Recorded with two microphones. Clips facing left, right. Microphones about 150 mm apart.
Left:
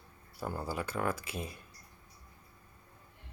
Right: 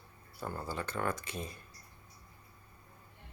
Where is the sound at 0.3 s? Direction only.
10° left (ahead or behind).